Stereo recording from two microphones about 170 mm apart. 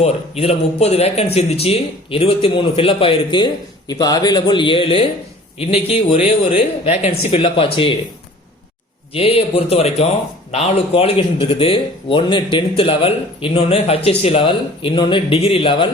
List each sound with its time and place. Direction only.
0.0 s speech: 35° left (ahead or behind)
9.1 s speech: 35° left (ahead or behind)